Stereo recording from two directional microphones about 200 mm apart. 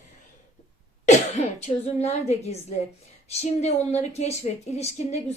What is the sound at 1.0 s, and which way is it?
A woman's voice, 35° left (ahead or behind).